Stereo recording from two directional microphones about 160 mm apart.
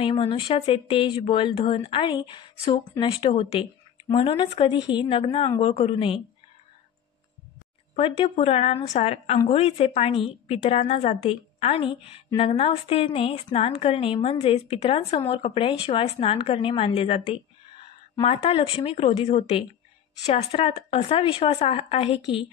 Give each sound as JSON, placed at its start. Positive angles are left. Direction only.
{"t": 0.0, "sound": "speech", "side_deg": 35}
{"t": 7.9, "sound": "speech", "side_deg": 40}